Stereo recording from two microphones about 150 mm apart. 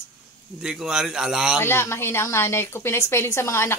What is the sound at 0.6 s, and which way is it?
Speech, 5° right (ahead or behind).